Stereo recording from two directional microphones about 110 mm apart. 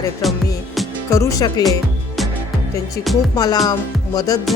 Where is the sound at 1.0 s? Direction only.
25° left (ahead or behind).